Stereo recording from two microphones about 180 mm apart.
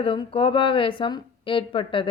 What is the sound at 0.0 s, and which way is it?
A woman's voice, 30° left (ahead or behind).